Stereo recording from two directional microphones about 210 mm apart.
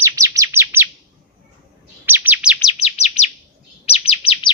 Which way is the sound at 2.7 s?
30° left (ahead or behind).